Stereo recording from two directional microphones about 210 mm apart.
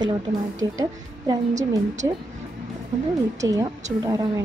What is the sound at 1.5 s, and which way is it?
Speech, 35° right (ahead or behind).